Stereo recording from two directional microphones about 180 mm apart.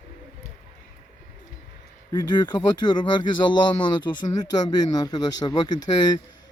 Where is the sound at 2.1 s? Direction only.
25° left (ahead or behind).